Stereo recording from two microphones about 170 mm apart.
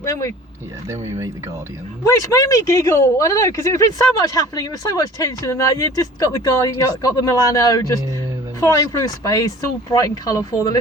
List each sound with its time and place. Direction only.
0.0 s speech: 20° left (ahead or behind)
2.0 s speech: 20° left (ahead or behind)